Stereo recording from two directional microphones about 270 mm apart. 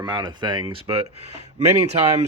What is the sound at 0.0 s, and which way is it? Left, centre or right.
Speech, centre.